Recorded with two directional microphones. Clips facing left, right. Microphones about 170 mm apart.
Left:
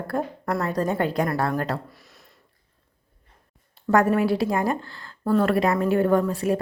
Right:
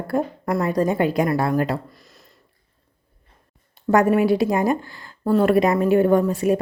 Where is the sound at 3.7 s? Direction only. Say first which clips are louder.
Right 3 dB; 15° right (ahead or behind).